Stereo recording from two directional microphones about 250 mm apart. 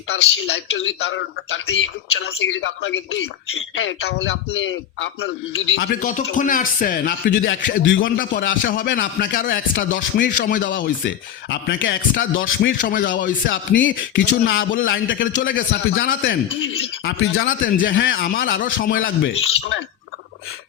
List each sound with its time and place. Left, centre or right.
0.1 s a man's voice: left
5.9 s a man's voice: left
8.1 s a man's voice: left
10.2 s a man's voice: left
10.7 s a man's voice: left
12.8 s a man's voice: left
13.5 s a man's voice: left
15.4 s a man's voice: left
16.6 s a man's voice: left
18.9 s a man's voice: left